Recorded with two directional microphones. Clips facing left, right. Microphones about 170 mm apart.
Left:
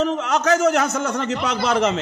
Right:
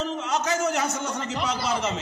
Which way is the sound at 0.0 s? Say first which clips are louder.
Left 7 dB; 75° left (ahead or behind).